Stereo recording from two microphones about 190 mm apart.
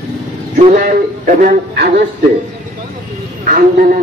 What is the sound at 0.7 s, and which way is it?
A man's voice, 50° right (ahead or behind).